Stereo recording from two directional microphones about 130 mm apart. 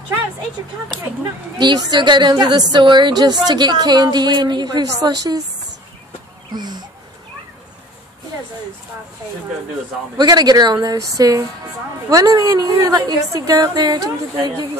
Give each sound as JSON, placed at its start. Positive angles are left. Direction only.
{"t": 1.6, "sound": "a woman's voice", "side_deg": -35}
{"t": 6.5, "sound": "a woman's voice", "side_deg": -35}
{"t": 10.1, "sound": "a woman's voice", "side_deg": -30}